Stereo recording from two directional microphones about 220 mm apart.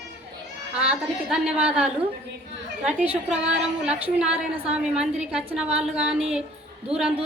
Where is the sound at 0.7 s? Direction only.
5° right (ahead or behind).